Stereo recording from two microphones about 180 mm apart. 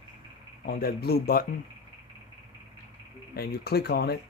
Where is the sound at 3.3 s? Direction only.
60° left (ahead or behind).